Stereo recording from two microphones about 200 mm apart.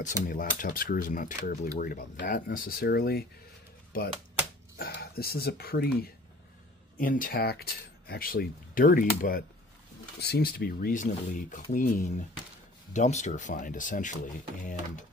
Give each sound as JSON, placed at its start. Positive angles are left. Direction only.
{"t": 0.3, "sound": "speech", "side_deg": 45}